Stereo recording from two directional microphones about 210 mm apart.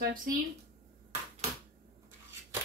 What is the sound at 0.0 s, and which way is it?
Speech, 40° right (ahead or behind).